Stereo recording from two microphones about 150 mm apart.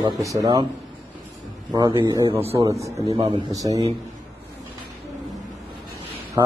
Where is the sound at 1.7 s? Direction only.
25° right (ahead or behind).